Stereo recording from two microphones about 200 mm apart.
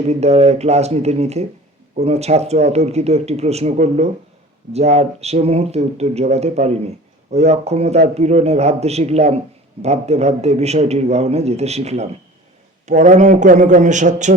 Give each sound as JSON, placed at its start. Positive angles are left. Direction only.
{"t": 0.1, "sound": "speech", "side_deg": -30}